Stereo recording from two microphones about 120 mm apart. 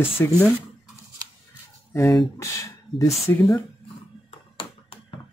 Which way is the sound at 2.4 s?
25° left (ahead or behind).